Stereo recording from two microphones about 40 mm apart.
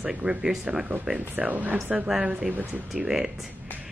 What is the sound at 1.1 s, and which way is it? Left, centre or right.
Speech, right.